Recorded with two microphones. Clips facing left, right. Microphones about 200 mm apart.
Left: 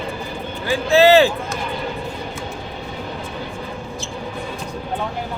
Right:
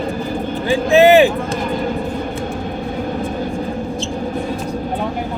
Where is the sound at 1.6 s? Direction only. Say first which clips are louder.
Right 6 dB; 45° right (ahead or behind).